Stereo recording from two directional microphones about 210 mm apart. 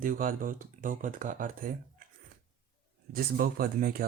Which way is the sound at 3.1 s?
45° right (ahead or behind).